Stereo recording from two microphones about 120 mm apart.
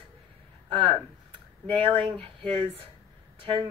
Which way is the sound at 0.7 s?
55° right (ahead or behind).